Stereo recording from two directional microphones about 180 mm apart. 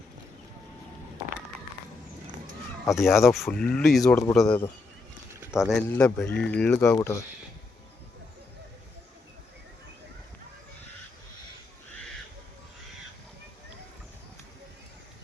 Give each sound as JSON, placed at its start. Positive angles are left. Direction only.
{"t": 2.9, "sound": "speech", "side_deg": 0}